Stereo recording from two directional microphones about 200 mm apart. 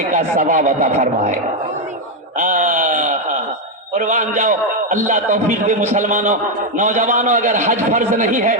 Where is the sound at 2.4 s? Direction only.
40° right (ahead or behind).